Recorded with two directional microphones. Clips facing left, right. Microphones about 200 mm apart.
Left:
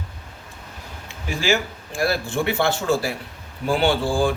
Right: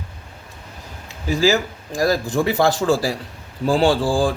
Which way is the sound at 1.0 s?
35° right (ahead or behind).